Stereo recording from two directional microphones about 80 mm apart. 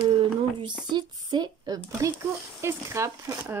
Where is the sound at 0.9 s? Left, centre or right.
Right.